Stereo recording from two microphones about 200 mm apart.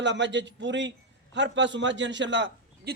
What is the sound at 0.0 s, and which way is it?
A man's voice, 65° right (ahead or behind).